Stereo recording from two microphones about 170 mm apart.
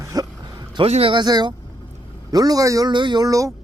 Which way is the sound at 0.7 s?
35° right (ahead or behind).